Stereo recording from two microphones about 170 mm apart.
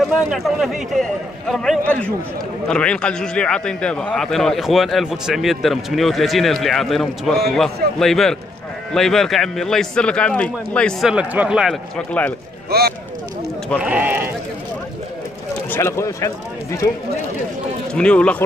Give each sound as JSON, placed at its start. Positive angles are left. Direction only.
{"t": 0.3, "sound": "a man's voice", "side_deg": 0}
{"t": 12.1, "sound": "speech", "side_deg": 10}
{"t": 13.8, "sound": "speech", "side_deg": -10}
{"t": 15.7, "sound": "speech", "side_deg": 15}
{"t": 17.9, "sound": "speech", "side_deg": 5}